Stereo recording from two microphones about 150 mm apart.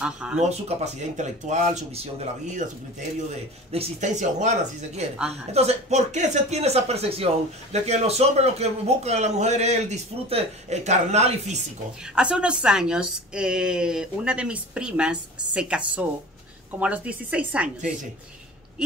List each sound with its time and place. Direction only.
0.4 s a man's voice: 45° right (ahead or behind)
3.7 s a man's voice: 45° right (ahead or behind)
12.2 s a woman's voice: 5° right (ahead or behind)